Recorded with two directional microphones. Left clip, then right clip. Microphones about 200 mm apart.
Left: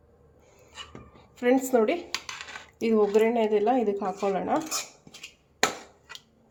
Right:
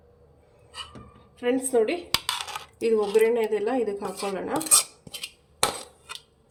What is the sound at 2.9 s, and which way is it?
Speech, 35° left (ahead or behind).